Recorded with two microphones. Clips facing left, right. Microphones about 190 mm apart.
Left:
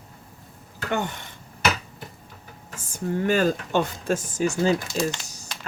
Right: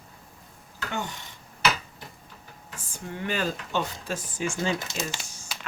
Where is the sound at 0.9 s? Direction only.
60° left (ahead or behind).